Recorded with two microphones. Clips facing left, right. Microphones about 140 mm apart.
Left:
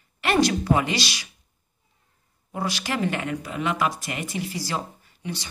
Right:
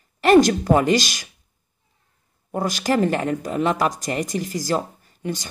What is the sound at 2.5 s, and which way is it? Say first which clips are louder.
Speech: right 7 dB; 45° right (ahead or behind).